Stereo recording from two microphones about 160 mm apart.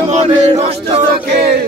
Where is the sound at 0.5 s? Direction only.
35° right (ahead or behind).